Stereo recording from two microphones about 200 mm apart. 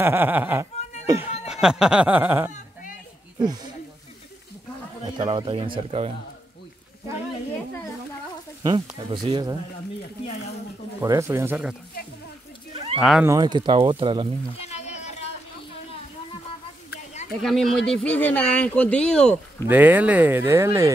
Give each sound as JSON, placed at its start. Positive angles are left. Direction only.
{"t": 0.0, "sound": "speech", "side_deg": -10}
{"t": 5.0, "sound": "speech", "side_deg": -20}
{"t": 8.6, "sound": "speech", "side_deg": -25}
{"t": 11.0, "sound": "speech", "side_deg": -15}
{"t": 13.0, "sound": "speech", "side_deg": 0}
{"t": 13.3, "sound": "speech", "side_deg": -20}
{"t": 14.6, "sound": "splash", "side_deg": 35}
{"t": 17.4, "sound": "speech", "side_deg": 0}
{"t": 19.7, "sound": "speech", "side_deg": -10}